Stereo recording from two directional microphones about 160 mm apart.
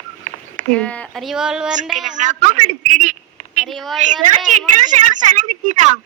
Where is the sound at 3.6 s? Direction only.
Centre (ahead or behind).